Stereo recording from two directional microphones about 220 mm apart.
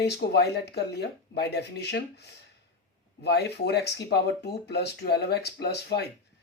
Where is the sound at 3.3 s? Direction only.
50° left (ahead or behind).